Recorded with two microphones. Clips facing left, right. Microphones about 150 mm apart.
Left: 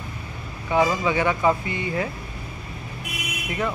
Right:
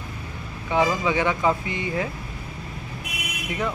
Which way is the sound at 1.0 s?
15° right (ahead or behind).